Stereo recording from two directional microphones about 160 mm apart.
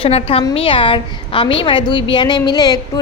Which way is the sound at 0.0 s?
35° left (ahead or behind).